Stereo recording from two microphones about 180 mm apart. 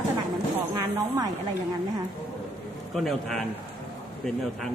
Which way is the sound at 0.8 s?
20° right (ahead or behind).